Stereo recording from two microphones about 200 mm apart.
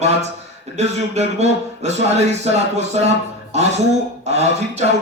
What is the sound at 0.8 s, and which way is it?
A man's voice, 35° right (ahead or behind).